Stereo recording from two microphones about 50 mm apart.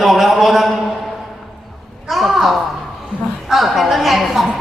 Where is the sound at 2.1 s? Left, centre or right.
Centre.